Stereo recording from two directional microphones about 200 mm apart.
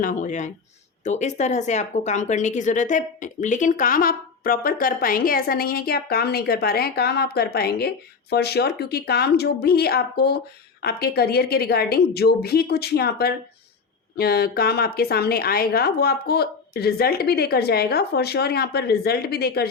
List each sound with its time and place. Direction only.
0.0 s speech: 40° left (ahead or behind)